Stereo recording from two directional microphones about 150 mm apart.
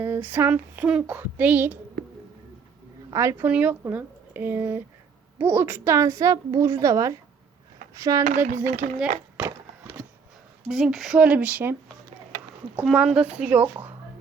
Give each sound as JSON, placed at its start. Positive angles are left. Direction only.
{"t": 0.0, "sound": "speech", "side_deg": -15}
{"t": 3.1, "sound": "a woman's voice", "side_deg": -20}
{"t": 8.2, "sound": "speech", "side_deg": -55}
{"t": 8.5, "sound": "speech", "side_deg": -15}
{"t": 10.7, "sound": "speech", "side_deg": 0}